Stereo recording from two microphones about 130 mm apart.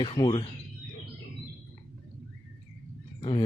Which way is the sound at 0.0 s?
45° left (ahead or behind).